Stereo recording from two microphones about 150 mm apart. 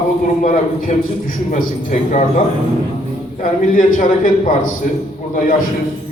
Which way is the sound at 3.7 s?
65° left (ahead or behind).